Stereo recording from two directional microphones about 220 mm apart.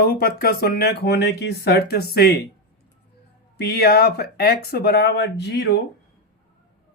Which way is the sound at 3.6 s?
45° left (ahead or behind).